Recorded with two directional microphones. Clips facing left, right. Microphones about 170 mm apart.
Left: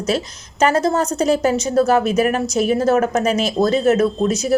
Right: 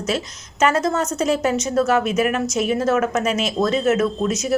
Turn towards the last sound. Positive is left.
turn(degrees=35)  # may be behind; listen again after turning